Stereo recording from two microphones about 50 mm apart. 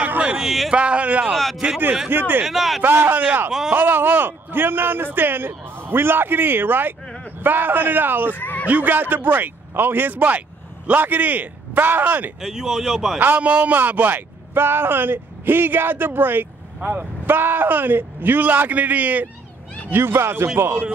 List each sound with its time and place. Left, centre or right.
0.4 s speech: centre
0.7 s speech: right
1.3 s a sound: centre
2.0 s a man's voice: right
2.4 s speech: centre
2.8 s a man's voice: right
3.7 s a man's voice: right
8.4 s speech: left
8.6 s a man's voice: right
12.4 s speech: centre
13.4 s a man's voice: right
19.9 s speech: right